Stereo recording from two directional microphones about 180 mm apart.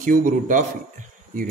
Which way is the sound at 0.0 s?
45° right (ahead or behind).